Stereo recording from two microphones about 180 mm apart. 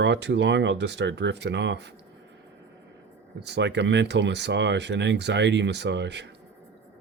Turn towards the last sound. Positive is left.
turn(degrees=-75)  # may be behind; listen again after turning